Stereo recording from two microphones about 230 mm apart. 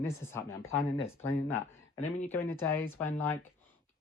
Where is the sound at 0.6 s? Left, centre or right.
Left.